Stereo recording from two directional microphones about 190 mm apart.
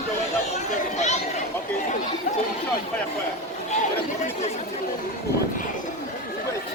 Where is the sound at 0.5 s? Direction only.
35° left (ahead or behind).